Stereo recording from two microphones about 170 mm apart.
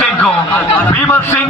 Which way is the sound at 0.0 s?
10° left (ahead or behind).